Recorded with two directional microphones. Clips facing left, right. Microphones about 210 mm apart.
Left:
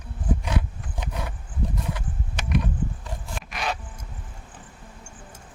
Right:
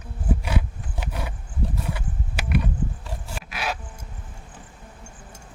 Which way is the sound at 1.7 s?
5° right (ahead or behind).